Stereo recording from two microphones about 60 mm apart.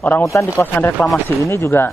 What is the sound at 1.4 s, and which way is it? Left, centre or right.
Speech, left.